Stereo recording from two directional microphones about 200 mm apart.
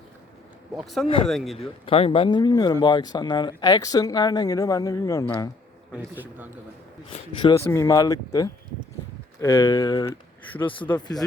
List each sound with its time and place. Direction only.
0.8 s speech: centre (ahead or behind)
1.5 s speech: 30° left (ahead or behind); by 5.5 s 10° left (ahead or behind)
5.9 s a man's voice: 10° right (ahead or behind)
7.1 s speech: 25° left (ahead or behind)